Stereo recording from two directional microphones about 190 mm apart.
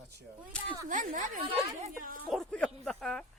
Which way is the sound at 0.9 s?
40° right (ahead or behind).